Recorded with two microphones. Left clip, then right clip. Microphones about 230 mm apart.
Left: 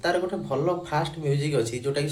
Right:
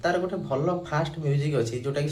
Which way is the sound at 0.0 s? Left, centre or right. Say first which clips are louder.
Even; centre.